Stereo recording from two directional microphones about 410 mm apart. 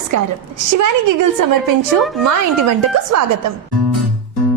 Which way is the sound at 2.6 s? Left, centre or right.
Right.